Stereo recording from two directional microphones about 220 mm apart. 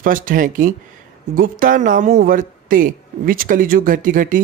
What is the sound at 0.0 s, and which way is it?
Speech, 40° right (ahead or behind).